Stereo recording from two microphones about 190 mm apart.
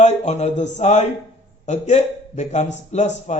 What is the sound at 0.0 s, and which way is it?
A man's voice, 35° left (ahead or behind).